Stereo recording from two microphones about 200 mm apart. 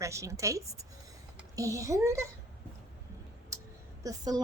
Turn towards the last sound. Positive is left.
turn(degrees=-20)  # may be behind; listen again after turning